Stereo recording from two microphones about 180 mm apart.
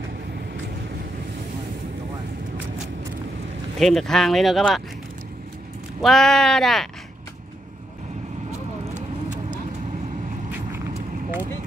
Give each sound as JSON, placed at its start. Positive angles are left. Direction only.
{"t": 3.8, "sound": "speech", "side_deg": 0}
{"t": 6.0, "sound": "speech", "side_deg": 0}
{"t": 8.5, "sound": "vehicle", "side_deg": -40}